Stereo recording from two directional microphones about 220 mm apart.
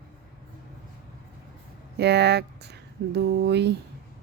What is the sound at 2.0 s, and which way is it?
Speech, 50° right (ahead or behind).